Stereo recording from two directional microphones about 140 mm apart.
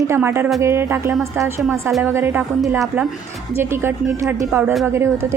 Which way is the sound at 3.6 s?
15° right (ahead or behind).